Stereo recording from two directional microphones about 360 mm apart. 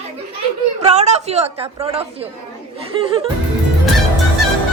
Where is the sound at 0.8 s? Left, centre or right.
Centre.